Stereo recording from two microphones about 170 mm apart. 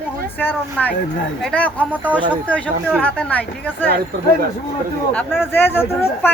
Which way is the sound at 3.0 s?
10° left (ahead or behind).